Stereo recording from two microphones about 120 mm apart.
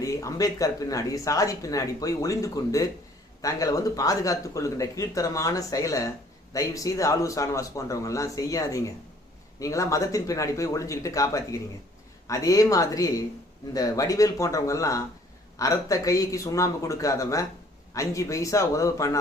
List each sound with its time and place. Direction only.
0.0 s speech: 30° left (ahead or behind)